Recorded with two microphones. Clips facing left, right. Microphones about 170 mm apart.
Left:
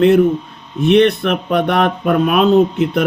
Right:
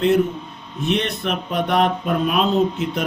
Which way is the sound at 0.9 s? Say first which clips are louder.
Left 10 dB; 65° left (ahead or behind).